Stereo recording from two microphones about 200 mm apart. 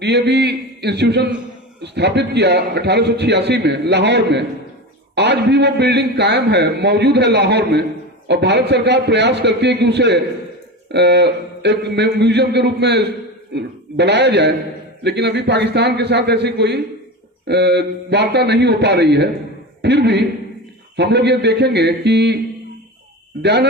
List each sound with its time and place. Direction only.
0.0 s a man's voice: 55° right (ahead or behind)
23.4 s a man's voice: 55° right (ahead or behind)